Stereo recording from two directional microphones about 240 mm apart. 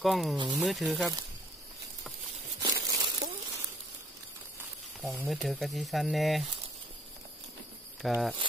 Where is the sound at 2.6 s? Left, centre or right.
Centre.